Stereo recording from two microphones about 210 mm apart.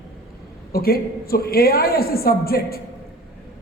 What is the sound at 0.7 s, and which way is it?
A man's voice, 45° left (ahead or behind).